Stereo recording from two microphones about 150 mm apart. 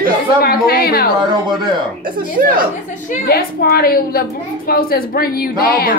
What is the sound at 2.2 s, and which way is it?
Speech, 70° right (ahead or behind).